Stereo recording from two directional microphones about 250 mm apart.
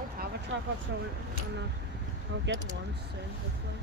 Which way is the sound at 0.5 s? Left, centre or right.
Right.